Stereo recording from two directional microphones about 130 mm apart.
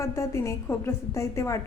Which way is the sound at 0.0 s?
20° left (ahead or behind).